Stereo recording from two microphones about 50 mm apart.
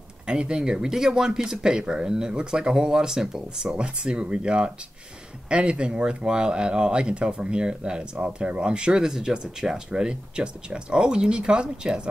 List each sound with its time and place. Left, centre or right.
0.3 s speech: centre